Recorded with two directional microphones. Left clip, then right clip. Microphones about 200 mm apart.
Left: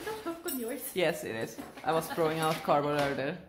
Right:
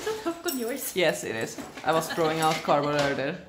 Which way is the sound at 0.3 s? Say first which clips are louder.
Right 7 dB; 45° right (ahead or behind).